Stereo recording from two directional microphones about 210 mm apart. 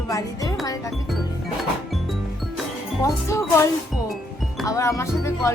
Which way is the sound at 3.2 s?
15° left (ahead or behind).